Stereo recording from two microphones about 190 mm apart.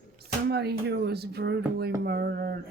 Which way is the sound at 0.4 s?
60° right (ahead or behind).